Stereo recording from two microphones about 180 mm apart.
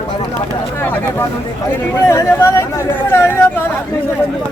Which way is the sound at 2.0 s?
15° left (ahead or behind).